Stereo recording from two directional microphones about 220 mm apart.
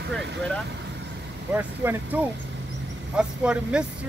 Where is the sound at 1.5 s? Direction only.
10° right (ahead or behind).